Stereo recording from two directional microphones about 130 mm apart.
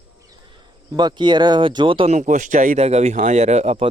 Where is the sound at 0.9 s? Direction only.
35° right (ahead or behind).